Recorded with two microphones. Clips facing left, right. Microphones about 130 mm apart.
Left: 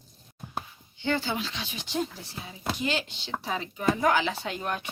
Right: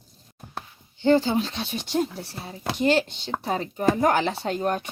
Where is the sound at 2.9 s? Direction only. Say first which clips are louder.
Right 8 dB; 50° right (ahead or behind).